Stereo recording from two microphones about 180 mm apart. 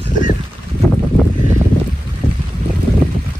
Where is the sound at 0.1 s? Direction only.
45° left (ahead or behind).